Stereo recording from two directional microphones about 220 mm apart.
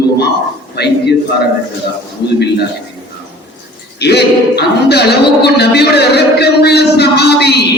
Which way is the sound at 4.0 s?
50° left (ahead or behind).